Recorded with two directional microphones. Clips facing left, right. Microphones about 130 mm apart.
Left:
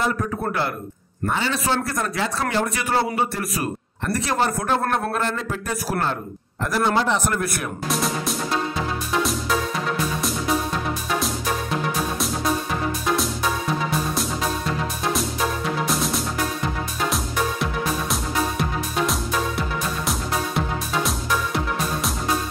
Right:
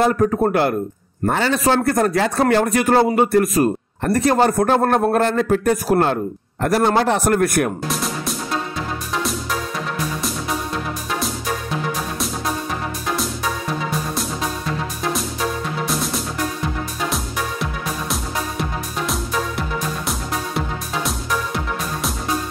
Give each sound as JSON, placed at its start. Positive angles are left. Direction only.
{"t": 0.0, "sound": "a man's voice", "side_deg": -50}
{"t": 7.9, "sound": "music", "side_deg": 0}
{"t": 15.9, "sound": "music", "side_deg": 0}
{"t": 18.1, "sound": "music", "side_deg": 0}